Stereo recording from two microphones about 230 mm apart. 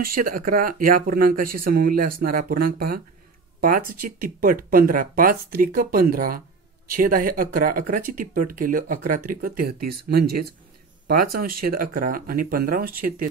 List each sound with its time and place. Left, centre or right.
0.0 s speech: right